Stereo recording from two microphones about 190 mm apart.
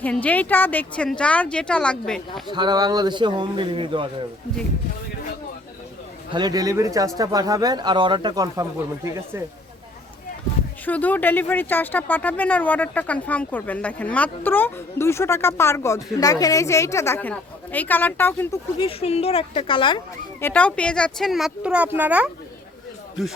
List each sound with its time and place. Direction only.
0.0 s speech: 10° left (ahead or behind)
2.5 s speech: 20° right (ahead or behind)
6.3 s speech: 20° right (ahead or behind)
10.8 s speech: 10° left (ahead or behind)
18.8 s a woman's voice: 30° left (ahead or behind)
20.4 s speech: 10° left (ahead or behind); by 22.3 s 10° right (ahead or behind)